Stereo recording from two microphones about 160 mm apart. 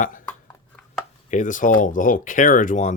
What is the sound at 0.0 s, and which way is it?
Speech, 55° left (ahead or behind).